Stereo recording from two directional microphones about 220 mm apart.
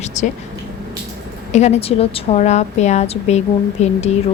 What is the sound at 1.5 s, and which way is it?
A woman's voice, 30° left (ahead or behind).